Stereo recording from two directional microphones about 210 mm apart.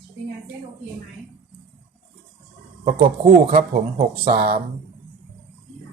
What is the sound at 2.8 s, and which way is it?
Speech, 25° right (ahead or behind).